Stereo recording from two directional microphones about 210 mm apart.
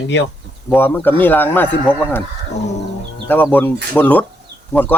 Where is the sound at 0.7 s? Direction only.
10° left (ahead or behind).